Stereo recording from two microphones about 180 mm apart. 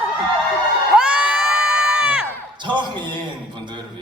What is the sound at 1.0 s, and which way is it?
Crowd, 5° right (ahead or behind).